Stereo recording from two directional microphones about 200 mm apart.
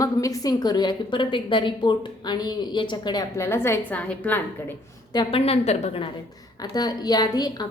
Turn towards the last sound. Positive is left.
turn(degrees=20)  # may be behind; listen again after turning